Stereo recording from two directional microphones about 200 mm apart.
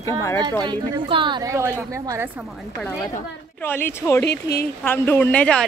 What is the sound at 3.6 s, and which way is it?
Speech, 10° left (ahead or behind).